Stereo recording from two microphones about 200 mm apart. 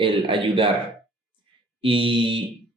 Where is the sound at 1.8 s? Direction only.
25° right (ahead or behind).